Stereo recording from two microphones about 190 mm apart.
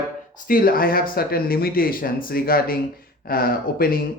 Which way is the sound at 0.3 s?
50° left (ahead or behind).